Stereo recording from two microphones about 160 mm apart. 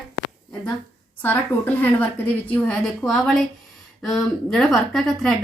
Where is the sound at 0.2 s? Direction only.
70° left (ahead or behind).